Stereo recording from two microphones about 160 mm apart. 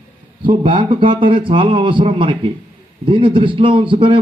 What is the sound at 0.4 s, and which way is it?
A man's voice, 30° right (ahead or behind).